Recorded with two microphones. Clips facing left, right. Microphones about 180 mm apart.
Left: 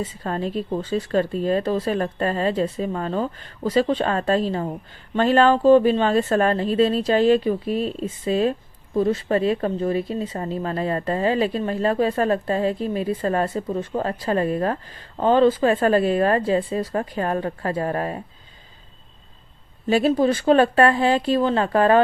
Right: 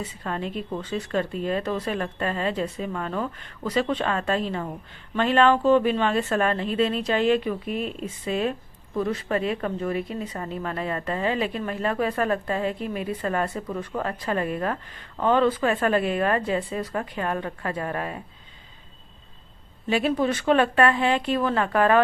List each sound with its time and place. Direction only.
0.0 s speech: 35° left (ahead or behind)
19.9 s speech: 35° left (ahead or behind)